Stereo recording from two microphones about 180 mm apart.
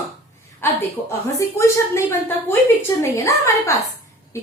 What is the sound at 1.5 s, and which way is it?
Speech, 15° left (ahead or behind).